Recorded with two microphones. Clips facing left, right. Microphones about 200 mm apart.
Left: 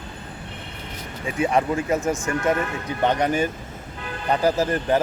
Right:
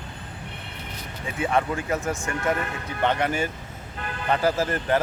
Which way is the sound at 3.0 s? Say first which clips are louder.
Left 3 dB; 15° left (ahead or behind).